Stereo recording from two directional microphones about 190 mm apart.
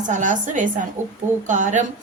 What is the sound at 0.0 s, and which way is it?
A woman's voice, 40° right (ahead or behind).